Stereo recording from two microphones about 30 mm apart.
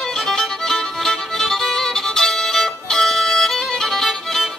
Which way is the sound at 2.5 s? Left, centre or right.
Centre.